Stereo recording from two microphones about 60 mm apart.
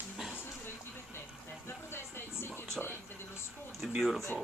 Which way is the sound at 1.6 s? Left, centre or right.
Left.